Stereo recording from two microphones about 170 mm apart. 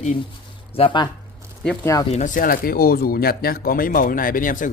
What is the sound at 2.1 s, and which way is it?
Speech, 50° left (ahead or behind).